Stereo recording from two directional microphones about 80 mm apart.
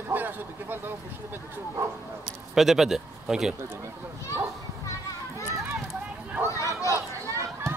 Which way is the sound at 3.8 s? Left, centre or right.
Right.